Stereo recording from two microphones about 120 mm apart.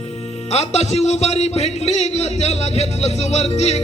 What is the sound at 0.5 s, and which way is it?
A man's voice, 65° left (ahead or behind).